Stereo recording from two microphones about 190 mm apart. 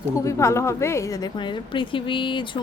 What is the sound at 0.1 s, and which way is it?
A woman's voice, 15° left (ahead or behind).